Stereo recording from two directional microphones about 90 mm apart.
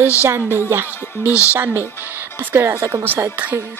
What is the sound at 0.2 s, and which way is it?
A woman's voice, 25° right (ahead or behind).